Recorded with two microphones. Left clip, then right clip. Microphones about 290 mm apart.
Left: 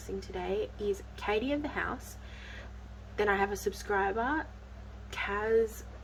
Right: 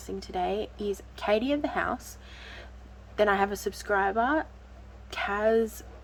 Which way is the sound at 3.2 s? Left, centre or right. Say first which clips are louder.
Right 5 dB; centre.